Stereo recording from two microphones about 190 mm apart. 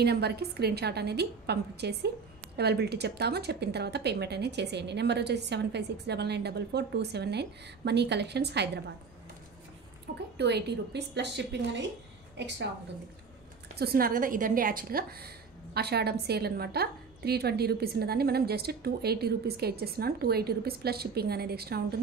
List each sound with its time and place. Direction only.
0.0 s a woman's voice: 60° right (ahead or behind)
10.3 s a woman's voice: 60° right (ahead or behind)
13.7 s a woman's voice: 50° right (ahead or behind)